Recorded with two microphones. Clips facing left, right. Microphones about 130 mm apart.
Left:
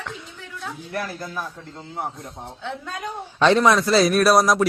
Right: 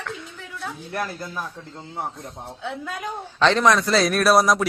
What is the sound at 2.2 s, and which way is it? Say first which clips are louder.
Speech: even; centre (ahead or behind).